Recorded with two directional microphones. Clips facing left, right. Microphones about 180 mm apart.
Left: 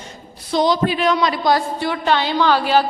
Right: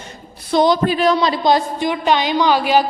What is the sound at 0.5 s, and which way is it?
A woman's voice, 50° right (ahead or behind).